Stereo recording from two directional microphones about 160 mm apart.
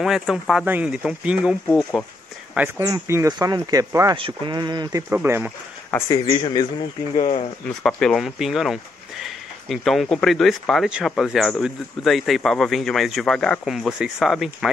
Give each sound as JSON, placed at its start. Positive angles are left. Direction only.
{"t": 0.0, "sound": "speech", "side_deg": 0}
{"t": 1.7, "sound": "speech", "side_deg": 5}
{"t": 2.8, "sound": "speech", "side_deg": -20}
{"t": 5.1, "sound": "speech", "side_deg": -15}
{"t": 6.0, "sound": "speech", "side_deg": 30}
{"t": 7.2, "sound": "speech", "side_deg": 40}
{"t": 7.6, "sound": "speech", "side_deg": 5}